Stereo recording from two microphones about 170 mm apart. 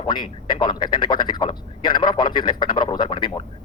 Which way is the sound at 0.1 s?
25° left (ahead or behind).